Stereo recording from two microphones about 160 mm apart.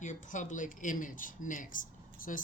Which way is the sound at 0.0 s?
55° left (ahead or behind).